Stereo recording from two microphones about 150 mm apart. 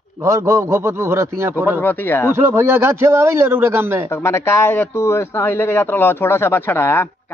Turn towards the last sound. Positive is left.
turn(degrees=15)  # may be behind; listen again after turning